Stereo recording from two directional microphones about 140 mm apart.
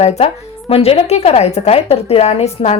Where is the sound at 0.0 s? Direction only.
50° left (ahead or behind).